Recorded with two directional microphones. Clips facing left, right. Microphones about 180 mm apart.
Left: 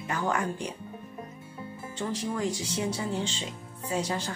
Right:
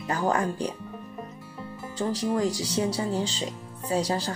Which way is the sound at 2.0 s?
35° right (ahead or behind).